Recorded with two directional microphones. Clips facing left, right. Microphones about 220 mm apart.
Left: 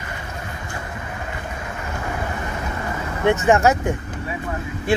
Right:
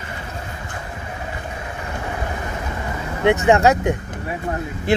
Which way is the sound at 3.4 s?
15° right (ahead or behind).